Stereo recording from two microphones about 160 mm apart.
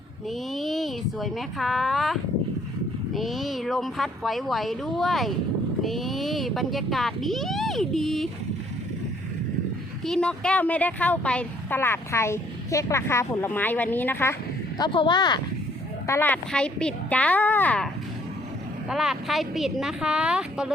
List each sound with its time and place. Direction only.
0.3 s speech: centre (ahead or behind)
10.0 s speech: 5° left (ahead or behind)
14.8 s speech: 30° left (ahead or behind)
16.0 s speech: 15° left (ahead or behind)
18.9 s speech: 5° right (ahead or behind)